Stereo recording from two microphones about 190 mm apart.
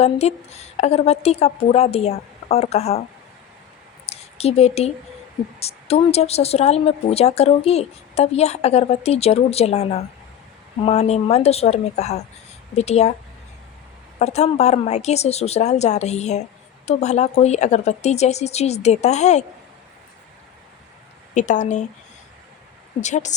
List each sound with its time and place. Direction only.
0.0 s speech: 35° left (ahead or behind)
4.0 s a sound: 35° left (ahead or behind)
5.5 s speech: 35° left (ahead or behind)
14.2 s speech: 35° left (ahead or behind)
21.3 s speech: 40° left (ahead or behind)
23.0 s speech: 40° left (ahead or behind)